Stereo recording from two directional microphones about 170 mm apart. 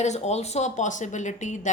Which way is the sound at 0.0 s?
40° left (ahead or behind).